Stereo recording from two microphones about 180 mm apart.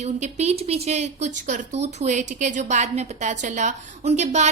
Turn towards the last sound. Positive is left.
turn(degrees=-40)  # may be behind; listen again after turning